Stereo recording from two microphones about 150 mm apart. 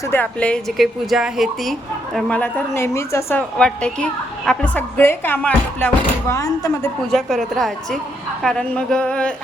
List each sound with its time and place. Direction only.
0.1 s a woman's voice: 10° left (ahead or behind)
3.6 s a woman's voice: 5° left (ahead or behind)
6.3 s speech: 20° left (ahead or behind)
7.1 s a woman's voice: centre (ahead or behind)